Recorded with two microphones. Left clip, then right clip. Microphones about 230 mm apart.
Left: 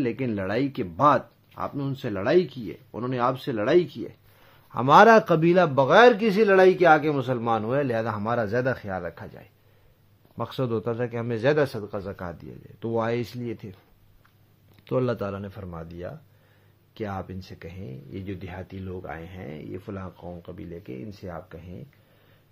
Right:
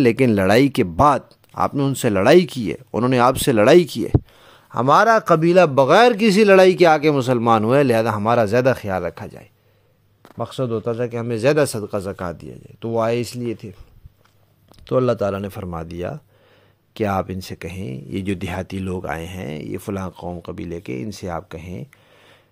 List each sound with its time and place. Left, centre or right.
0.0 s speech: right
4.5 s a man's voice: right
10.3 s speech: centre
14.9 s speech: right
15.3 s speech: right